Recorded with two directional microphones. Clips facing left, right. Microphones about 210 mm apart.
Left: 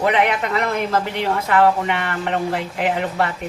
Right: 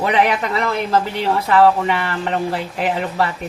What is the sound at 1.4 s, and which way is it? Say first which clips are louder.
Speech: right 3 dB; 35° right (ahead or behind).